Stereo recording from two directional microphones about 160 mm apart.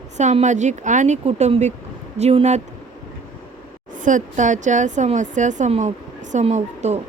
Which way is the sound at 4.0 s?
50° right (ahead or behind).